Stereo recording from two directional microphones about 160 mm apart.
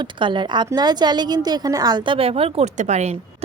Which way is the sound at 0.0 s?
30° right (ahead or behind).